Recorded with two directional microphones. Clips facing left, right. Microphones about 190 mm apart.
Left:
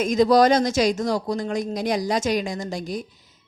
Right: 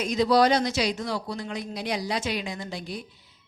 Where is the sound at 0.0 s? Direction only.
45° left (ahead or behind).